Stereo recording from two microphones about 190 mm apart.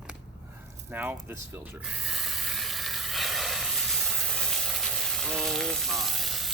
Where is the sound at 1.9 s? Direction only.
Centre (ahead or behind).